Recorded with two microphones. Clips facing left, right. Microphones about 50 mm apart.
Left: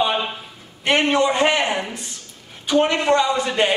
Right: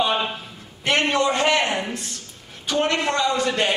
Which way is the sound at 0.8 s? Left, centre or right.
Centre.